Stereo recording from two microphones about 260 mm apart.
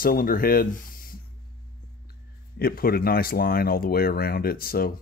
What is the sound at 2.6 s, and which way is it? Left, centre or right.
Speech, left.